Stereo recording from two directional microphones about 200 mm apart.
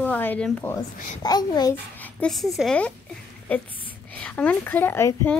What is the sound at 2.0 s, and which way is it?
A woman's voice, 5° left (ahead or behind).